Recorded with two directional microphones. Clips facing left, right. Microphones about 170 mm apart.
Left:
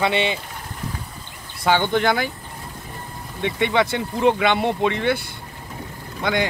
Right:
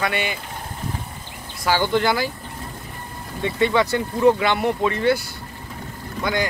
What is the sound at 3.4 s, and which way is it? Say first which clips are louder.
Speech: right 1 dB; 20° left (ahead or behind).